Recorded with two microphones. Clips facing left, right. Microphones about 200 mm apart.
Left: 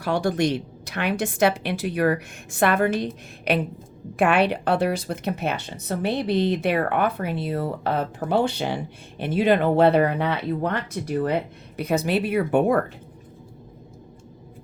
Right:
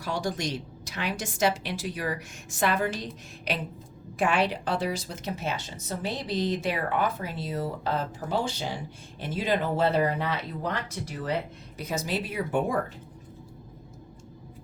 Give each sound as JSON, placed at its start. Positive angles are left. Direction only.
{"t": 0.0, "sound": "speech", "side_deg": 60}